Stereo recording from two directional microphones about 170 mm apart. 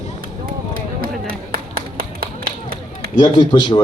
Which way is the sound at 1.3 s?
60° right (ahead or behind).